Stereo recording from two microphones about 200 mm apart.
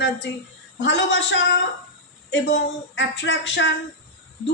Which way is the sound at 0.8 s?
65° left (ahead or behind).